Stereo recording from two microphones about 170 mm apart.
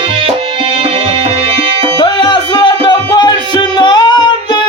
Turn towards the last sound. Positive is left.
turn(degrees=25)  # may be behind; listen again after turning